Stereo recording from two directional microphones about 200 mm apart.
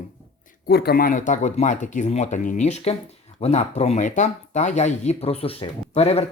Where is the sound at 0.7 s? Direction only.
50° left (ahead or behind).